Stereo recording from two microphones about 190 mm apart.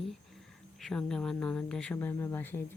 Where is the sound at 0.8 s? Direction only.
5° left (ahead or behind).